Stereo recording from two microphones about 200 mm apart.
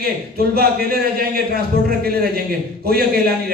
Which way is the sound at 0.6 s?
50° right (ahead or behind).